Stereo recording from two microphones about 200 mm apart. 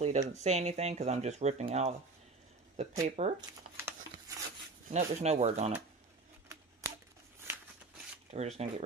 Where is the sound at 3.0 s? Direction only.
35° right (ahead or behind).